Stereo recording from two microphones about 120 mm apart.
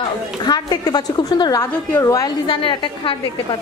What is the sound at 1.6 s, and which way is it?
Speech, 25° left (ahead or behind).